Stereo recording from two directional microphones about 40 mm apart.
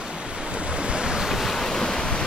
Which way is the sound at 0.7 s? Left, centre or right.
Right.